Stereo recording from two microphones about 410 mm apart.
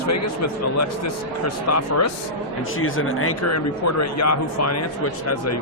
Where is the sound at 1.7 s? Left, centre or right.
Left.